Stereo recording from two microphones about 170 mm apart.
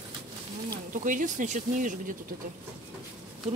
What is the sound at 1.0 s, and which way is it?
Speech, 50° right (ahead or behind).